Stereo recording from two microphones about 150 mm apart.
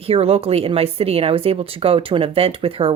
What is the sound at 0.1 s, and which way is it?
Speech, 40° right (ahead or behind).